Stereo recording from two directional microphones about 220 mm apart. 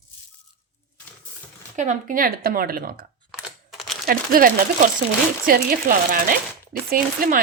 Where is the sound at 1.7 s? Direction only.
35° right (ahead or behind).